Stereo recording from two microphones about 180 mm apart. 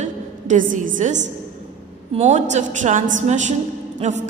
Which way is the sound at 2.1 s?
40° right (ahead or behind).